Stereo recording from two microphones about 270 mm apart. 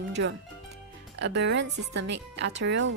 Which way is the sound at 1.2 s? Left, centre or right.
Right.